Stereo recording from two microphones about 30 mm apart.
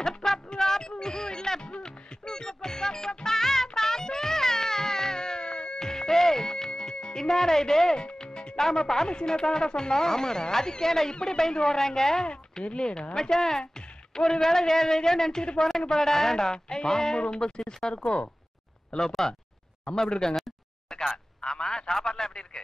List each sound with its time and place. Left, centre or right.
0.0 s a sound: centre
1.6 s music: left
8.0 s music: left
8.5 s a man's voice: centre
12.6 s speech: left
13.1 s a man's voice: centre; by 18.2 s left
18.9 s a man's voice: centre
21.5 s a sound: left
22.0 s speech: left